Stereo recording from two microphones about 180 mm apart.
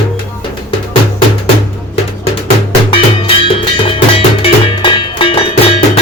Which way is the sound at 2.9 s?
30° left (ahead or behind).